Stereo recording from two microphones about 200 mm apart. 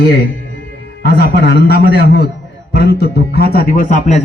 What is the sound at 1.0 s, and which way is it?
A man's voice, 50° left (ahead or behind).